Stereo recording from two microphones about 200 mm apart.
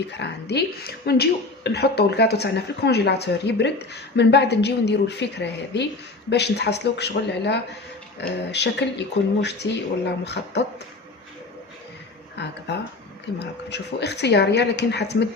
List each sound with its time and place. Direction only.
0.1 s a woman's voice: 60° left (ahead or behind)
12.4 s a woman's voice: 60° left (ahead or behind)